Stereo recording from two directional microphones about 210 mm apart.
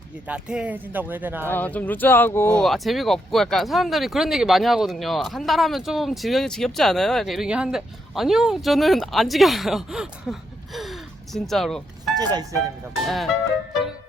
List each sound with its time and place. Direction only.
0.3 s speech: 5° right (ahead or behind)
1.5 s speech: 10° left (ahead or behind)
11.4 s speech: centre (ahead or behind)
12.2 s speech: 20° right (ahead or behind)
13.1 s speech: centre (ahead or behind)